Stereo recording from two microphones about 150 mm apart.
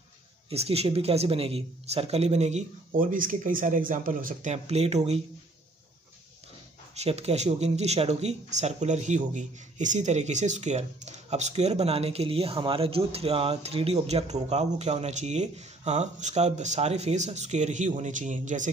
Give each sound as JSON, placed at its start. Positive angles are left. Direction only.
{"t": 0.5, "sound": "speech", "side_deg": -40}
{"t": 3.0, "sound": "speech", "side_deg": -65}
{"t": 7.0, "sound": "speech", "side_deg": -45}